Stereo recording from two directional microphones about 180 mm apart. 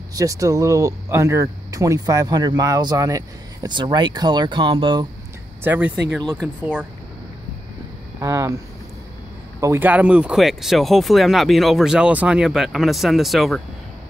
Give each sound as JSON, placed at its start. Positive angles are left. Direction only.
{"t": 0.1, "sound": "speech", "side_deg": -20}
{"t": 5.6, "sound": "speech", "side_deg": -10}
{"t": 6.1, "sound": "speech", "side_deg": 0}
{"t": 6.6, "sound": "speech", "side_deg": -10}
{"t": 8.2, "sound": "speech", "side_deg": -15}
{"t": 9.6, "sound": "speech", "side_deg": -15}